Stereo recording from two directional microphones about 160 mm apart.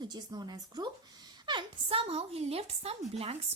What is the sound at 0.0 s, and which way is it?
A woman's voice, 25° right (ahead or behind).